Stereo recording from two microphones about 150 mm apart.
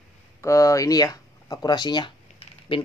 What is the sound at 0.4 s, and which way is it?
Speech, 20° left (ahead or behind).